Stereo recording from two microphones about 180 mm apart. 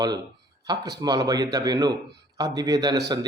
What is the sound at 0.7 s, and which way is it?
Speech, 20° right (ahead or behind).